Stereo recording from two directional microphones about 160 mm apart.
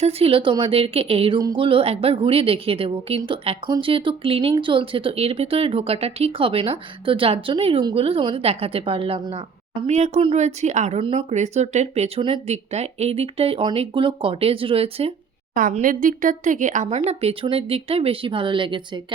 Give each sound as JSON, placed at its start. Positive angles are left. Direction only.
{"t": 0.0, "sound": "a woman's voice", "side_deg": -40}
{"t": 15.8, "sound": "speech", "side_deg": -55}